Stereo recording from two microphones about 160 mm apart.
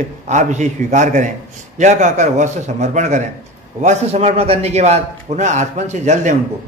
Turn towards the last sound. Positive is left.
turn(degrees=-50)  # may be behind; listen again after turning